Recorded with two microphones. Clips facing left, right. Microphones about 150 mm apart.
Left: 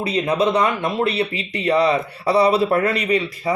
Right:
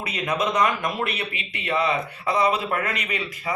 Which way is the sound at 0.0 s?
30° left (ahead or behind).